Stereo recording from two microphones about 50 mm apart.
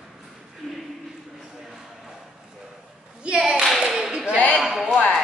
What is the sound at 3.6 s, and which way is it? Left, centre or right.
Clapping, centre.